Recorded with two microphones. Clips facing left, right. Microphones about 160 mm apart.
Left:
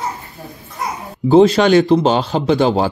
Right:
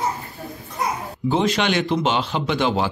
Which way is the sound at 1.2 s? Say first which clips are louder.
Left 10 dB; 35° left (ahead or behind).